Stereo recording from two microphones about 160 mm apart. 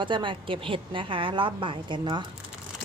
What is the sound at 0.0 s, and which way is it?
A woman's voice, 30° right (ahead or behind).